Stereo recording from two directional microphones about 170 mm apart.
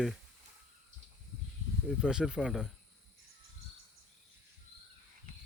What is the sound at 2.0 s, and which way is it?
Speech, 5° right (ahead or behind).